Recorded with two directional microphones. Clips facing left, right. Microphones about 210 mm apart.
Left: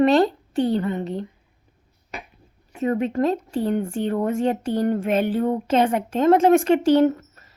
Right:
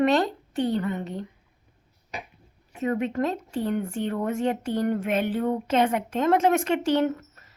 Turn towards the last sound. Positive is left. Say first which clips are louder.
# left 6 dB
turn(degrees=35)  # may be behind; listen again after turning